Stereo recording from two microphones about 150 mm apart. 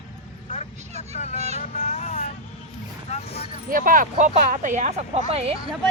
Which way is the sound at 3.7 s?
65° right (ahead or behind).